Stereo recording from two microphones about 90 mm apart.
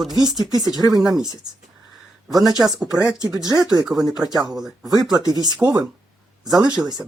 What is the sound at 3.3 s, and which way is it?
Speech, 45° right (ahead or behind).